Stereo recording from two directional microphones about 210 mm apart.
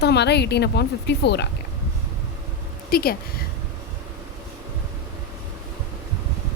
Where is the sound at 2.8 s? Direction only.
45° left (ahead or behind).